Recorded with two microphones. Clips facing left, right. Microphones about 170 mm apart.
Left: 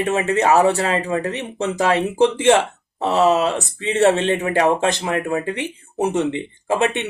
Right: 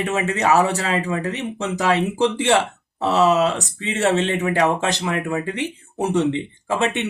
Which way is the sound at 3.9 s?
40° left (ahead or behind).